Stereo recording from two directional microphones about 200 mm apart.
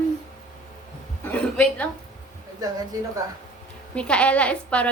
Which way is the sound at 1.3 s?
5° left (ahead or behind).